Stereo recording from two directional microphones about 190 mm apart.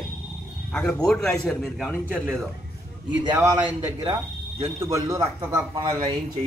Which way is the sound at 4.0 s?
30° right (ahead or behind).